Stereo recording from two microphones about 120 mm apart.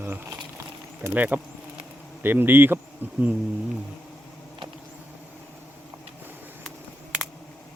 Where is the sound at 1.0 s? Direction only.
15° right (ahead or behind).